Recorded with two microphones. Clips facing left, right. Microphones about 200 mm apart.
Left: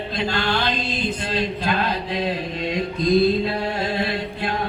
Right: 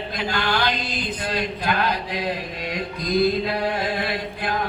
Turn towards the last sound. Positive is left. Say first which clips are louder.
# left 1 dB
turn(degrees=25)  # may be behind; listen again after turning